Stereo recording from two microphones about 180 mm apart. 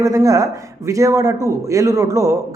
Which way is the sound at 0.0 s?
20° right (ahead or behind).